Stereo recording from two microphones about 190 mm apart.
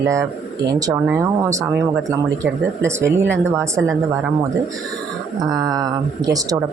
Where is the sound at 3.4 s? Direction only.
15° right (ahead or behind).